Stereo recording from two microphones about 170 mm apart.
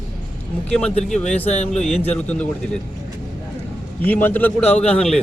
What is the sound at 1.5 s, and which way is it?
Speech, 40° left (ahead or behind).